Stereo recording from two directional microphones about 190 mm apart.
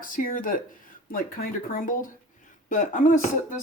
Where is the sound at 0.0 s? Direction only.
45° left (ahead or behind).